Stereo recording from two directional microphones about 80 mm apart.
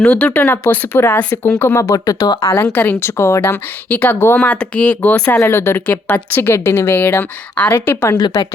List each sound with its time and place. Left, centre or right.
0.0 s a woman's voice: left
1.5 s speech: left
2.7 s a woman's voice: left
4.4 s speech: centre
5.4 s speech: left
5.8 s a woman's voice: centre